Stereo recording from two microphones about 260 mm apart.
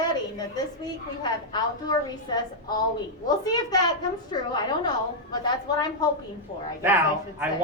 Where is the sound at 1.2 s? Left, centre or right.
Centre.